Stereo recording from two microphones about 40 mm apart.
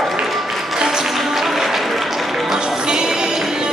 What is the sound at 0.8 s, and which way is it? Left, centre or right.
Music, centre.